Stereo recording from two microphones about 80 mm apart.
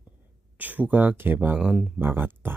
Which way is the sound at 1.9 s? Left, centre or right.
Right.